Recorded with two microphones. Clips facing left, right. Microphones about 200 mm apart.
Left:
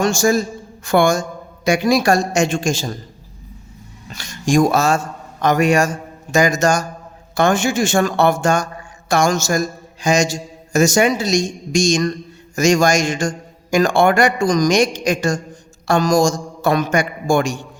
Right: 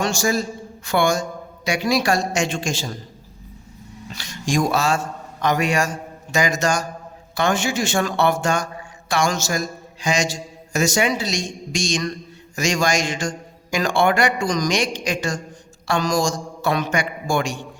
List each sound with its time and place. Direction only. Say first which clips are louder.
0.0 s a man's voice: left 5 dB; 45° left (ahead or behind)
4.1 s a man's voice: left 6 dB; 45° left (ahead or behind)